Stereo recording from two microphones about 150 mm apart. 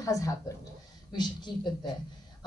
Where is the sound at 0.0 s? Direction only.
20° left (ahead or behind).